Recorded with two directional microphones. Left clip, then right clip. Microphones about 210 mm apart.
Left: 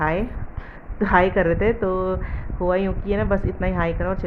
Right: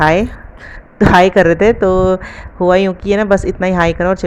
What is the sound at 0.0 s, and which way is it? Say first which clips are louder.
Speech: right 11 dB; 40° right (ahead or behind).